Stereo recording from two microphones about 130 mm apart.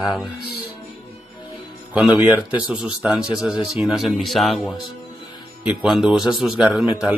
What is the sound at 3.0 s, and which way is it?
Speech, 5° right (ahead or behind).